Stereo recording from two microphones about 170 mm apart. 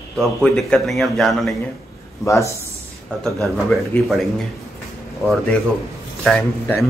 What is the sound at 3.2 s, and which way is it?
A man's voice, centre (ahead or behind).